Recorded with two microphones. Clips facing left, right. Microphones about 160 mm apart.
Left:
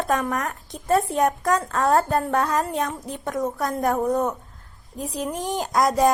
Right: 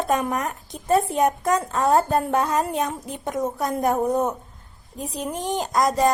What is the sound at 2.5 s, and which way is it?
A woman's voice, 20° right (ahead or behind).